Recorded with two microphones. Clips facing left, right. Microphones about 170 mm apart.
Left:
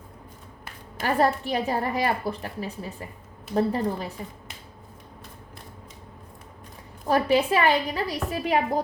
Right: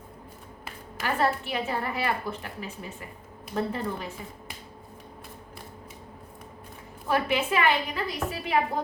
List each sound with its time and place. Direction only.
1.0 s a woman's voice: 40° left (ahead or behind)
7.1 s a woman's voice: 35° left (ahead or behind)